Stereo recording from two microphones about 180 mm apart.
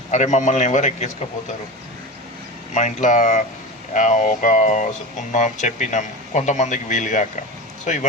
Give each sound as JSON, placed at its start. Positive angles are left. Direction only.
{"t": 0.1, "sound": "a man's voice", "side_deg": 40}
{"t": 2.7, "sound": "speech", "side_deg": 45}